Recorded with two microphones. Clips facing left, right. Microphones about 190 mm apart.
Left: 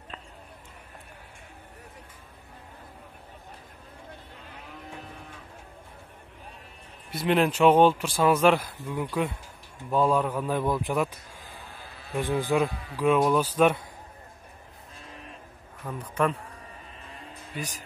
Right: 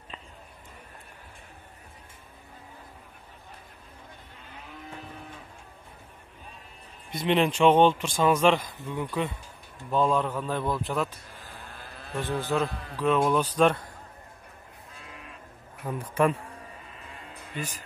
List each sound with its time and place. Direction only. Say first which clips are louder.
7.1 s a man's voice: left 1 dB; 5° left (ahead or behind)
12.1 s a man's voice: left 3 dB; 15° left (ahead or behind)
15.8 s a man's voice: right 3 dB; 15° right (ahead or behind)